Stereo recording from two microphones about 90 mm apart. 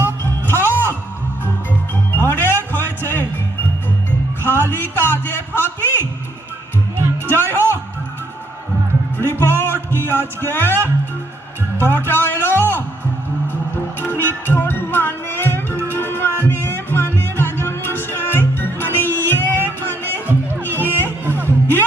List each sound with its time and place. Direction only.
0.4 s music: 25° left (ahead or behind)
2.1 s music: 25° left (ahead or behind)
4.4 s music: 25° left (ahead or behind)
7.3 s music: 25° left (ahead or behind)
9.1 s music: 25° left (ahead or behind)
14.0 s music: 25° left (ahead or behind)